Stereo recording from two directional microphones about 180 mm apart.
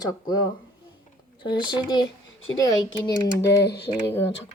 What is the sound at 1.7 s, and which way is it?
Speech, 25° left (ahead or behind).